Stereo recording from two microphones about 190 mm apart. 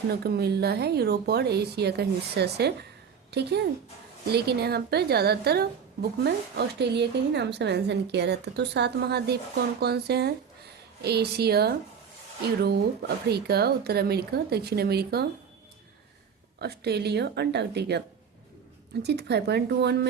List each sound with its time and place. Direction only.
0.1 s a woman's voice: 55° right (ahead or behind)
16.6 s a woman's voice: 60° right (ahead or behind)
19.0 s a woman's voice: 60° right (ahead or behind)